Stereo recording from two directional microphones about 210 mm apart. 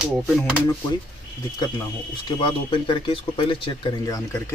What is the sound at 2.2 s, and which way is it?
Speech, 25° left (ahead or behind).